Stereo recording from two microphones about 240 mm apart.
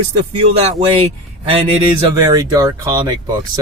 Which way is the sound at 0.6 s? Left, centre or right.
Right.